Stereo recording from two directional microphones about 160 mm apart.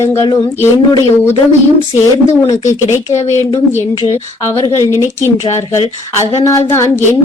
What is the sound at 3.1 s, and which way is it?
Speech, 45° left (ahead or behind).